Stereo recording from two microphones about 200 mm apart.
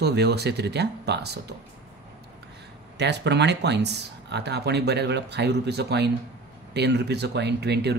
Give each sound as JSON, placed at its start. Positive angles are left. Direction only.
{"t": 0.0, "sound": "speech", "side_deg": -55}
{"t": 3.0, "sound": "speech", "side_deg": -60}